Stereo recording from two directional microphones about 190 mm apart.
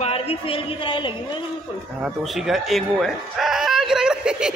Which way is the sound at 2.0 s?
Centre (ahead or behind).